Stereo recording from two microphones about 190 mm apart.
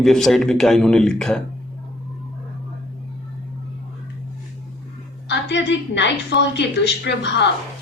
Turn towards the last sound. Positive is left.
turn(degrees=60)  # may be behind; listen again after turning